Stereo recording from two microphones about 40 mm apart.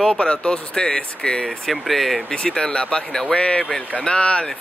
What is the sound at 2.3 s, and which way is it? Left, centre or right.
Speech, left.